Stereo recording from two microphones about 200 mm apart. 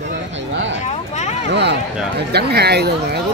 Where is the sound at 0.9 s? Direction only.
35° left (ahead or behind).